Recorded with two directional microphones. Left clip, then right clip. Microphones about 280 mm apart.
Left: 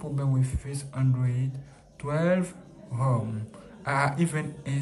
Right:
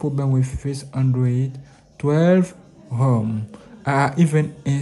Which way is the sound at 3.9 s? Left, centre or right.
Right.